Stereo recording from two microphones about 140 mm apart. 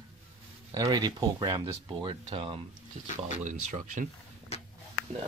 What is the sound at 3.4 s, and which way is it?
Speech, 60° right (ahead or behind).